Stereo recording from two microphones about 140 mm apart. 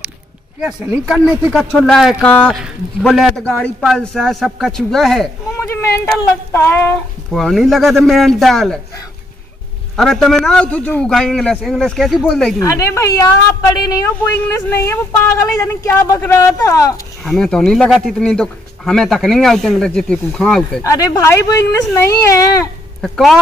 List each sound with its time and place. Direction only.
0.6 s speech: 5° right (ahead or behind)
2.2 s speech: 10° left (ahead or behind)
2.5 s speech: centre (ahead or behind)
5.6 s a sound: 20° left (ahead or behind)
6.5 s speech: 15° left (ahead or behind)
7.3 s speech: centre (ahead or behind)
9.9 s speech: 5° left (ahead or behind)
12.5 s speech: 20° left (ahead or behind)
17.2 s speech: 5° left (ahead or behind)
20.8 s speech: 25° left (ahead or behind)
23.0 s speech: centre (ahead or behind)